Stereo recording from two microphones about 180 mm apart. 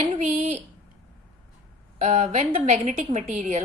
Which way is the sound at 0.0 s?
35° right (ahead or behind).